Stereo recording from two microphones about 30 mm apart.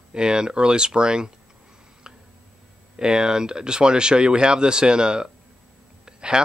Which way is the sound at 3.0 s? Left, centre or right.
Right.